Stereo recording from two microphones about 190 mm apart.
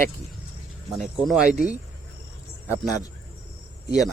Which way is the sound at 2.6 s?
10° right (ahead or behind).